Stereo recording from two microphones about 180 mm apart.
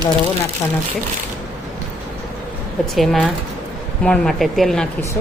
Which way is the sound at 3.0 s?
Centre (ahead or behind).